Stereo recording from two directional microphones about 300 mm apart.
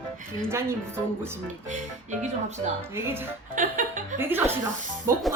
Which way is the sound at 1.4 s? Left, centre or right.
Right.